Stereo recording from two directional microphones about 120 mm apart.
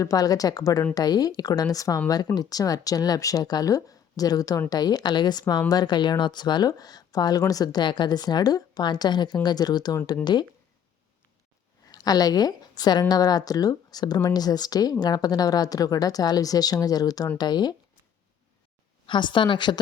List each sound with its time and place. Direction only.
0.0 s a woman's voice: 30° left (ahead or behind)
11.9 s a woman's voice: 30° left (ahead or behind)
19.0 s a woman's voice: 40° left (ahead or behind)